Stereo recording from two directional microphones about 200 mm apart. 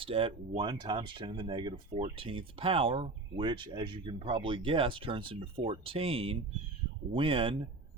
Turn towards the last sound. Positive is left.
turn(degrees=-25)  # may be behind; listen again after turning